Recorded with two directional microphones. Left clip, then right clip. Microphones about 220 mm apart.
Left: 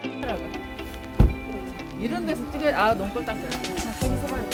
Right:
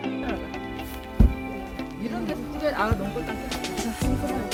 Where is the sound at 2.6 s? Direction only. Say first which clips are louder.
Left 4 dB; 35° left (ahead or behind).